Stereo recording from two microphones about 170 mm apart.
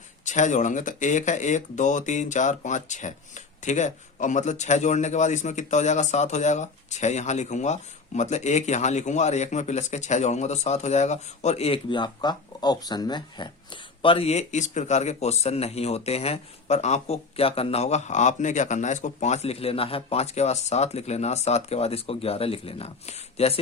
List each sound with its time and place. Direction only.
0.3 s speech: 45° left (ahead or behind)